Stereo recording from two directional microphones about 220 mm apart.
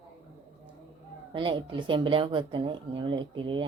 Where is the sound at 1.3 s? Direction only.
20° right (ahead or behind).